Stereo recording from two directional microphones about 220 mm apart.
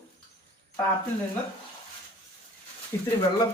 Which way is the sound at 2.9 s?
15° left (ahead or behind).